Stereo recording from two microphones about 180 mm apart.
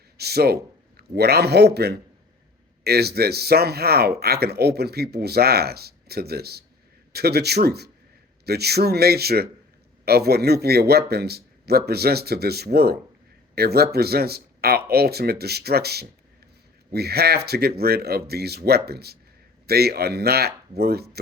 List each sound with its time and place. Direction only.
0.2 s a man's voice: 60° right (ahead or behind)